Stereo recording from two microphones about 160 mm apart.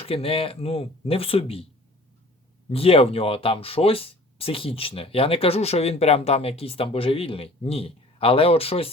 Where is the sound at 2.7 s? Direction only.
35° left (ahead or behind).